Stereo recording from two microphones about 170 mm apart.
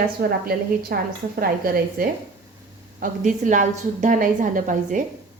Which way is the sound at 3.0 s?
50° right (ahead or behind).